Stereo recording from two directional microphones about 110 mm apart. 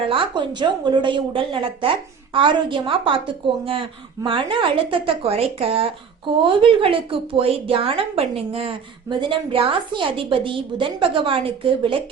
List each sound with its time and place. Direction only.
0.1 s a woman's voice: 45° right (ahead or behind)